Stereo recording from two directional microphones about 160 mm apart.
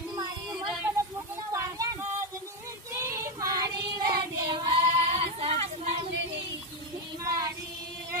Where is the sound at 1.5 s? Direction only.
20° right (ahead or behind).